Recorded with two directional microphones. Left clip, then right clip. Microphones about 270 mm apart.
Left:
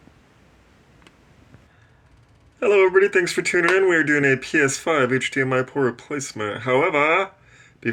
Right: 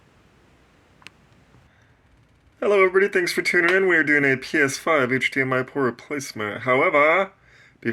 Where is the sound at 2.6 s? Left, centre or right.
Centre.